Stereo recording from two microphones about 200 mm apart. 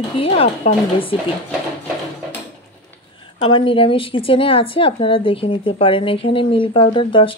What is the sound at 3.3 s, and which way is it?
A woman's voice, 25° left (ahead or behind).